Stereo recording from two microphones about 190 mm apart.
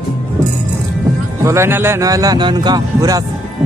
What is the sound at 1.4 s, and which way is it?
A man's voice, 15° right (ahead or behind).